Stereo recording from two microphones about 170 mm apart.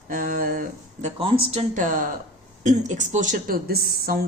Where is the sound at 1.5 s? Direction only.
40° right (ahead or behind).